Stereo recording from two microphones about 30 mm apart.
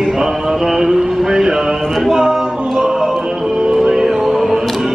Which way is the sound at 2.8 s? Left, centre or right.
Right.